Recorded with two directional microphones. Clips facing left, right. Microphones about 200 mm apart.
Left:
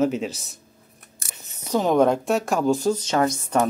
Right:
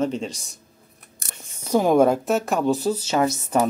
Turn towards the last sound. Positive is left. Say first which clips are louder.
# even
turn(degrees=-5)  # may be behind; listen again after turning